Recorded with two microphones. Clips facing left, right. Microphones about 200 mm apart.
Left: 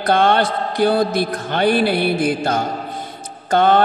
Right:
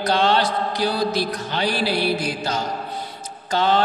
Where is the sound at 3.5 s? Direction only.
55° left (ahead or behind).